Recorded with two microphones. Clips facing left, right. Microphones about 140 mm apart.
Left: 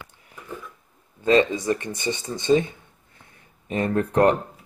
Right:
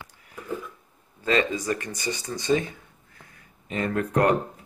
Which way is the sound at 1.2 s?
25° left (ahead or behind).